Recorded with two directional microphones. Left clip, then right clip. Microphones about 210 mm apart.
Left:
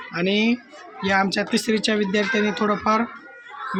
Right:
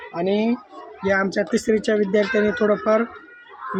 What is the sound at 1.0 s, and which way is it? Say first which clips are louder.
A child's voice: even; 10° left (ahead or behind).